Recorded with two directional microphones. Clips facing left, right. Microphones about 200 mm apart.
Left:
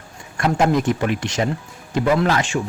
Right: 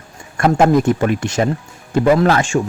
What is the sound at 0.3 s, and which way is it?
Speech, 50° right (ahead or behind).